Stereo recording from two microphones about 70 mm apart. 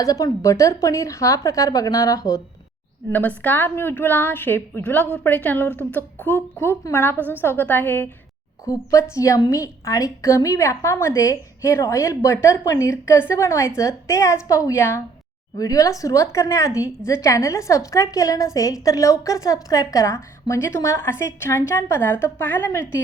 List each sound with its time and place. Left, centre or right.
0.0 s a woman's voice: left
3.1 s a woman's voice: left
8.6 s a woman's voice: left
15.5 s a woman's voice: left